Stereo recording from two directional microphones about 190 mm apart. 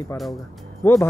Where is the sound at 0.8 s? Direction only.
15° left (ahead or behind).